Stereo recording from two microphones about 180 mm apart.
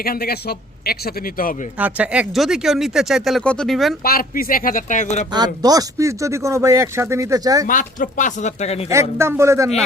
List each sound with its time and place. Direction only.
0.0 s speech: 60° left (ahead or behind)
1.8 s speech: 5° right (ahead or behind)
4.0 s a man's voice: 55° left (ahead or behind)
5.6 s speech: 20° right (ahead or behind)
7.7 s a man's voice: 45° left (ahead or behind)
8.9 s speech: 15° right (ahead or behind)